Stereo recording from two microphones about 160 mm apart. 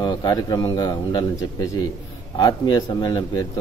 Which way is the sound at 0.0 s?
25° left (ahead or behind).